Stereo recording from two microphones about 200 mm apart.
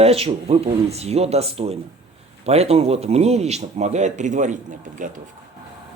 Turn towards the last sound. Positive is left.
turn(degrees=-40)  # may be behind; listen again after turning